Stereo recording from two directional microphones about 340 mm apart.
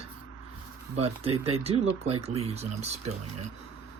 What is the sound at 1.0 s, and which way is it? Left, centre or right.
Speech, centre.